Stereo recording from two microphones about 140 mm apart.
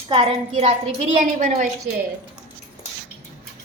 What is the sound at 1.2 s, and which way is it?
Speech, 60° right (ahead or behind).